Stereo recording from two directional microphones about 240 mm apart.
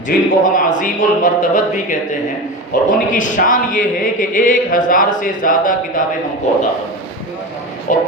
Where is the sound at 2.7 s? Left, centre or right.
Left.